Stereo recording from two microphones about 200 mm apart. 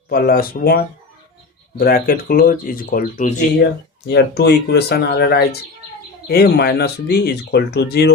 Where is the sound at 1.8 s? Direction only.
45° left (ahead or behind).